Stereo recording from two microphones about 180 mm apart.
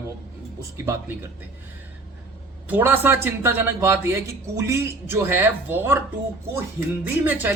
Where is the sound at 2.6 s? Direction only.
10° right (ahead or behind).